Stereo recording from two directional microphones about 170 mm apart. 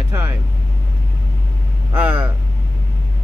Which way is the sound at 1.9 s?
10° right (ahead or behind).